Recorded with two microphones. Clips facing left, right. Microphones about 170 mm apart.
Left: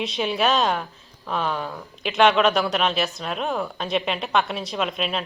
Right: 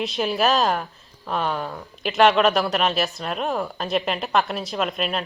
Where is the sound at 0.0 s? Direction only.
Centre (ahead or behind).